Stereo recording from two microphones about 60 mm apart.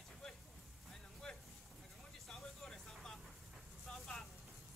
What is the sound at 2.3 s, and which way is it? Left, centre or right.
Vehicle, centre.